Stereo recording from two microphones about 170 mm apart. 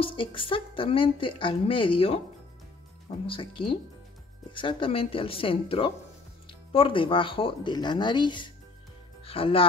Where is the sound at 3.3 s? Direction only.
30° left (ahead or behind).